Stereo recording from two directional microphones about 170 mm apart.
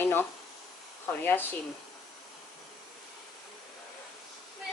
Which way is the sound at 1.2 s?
10° left (ahead or behind).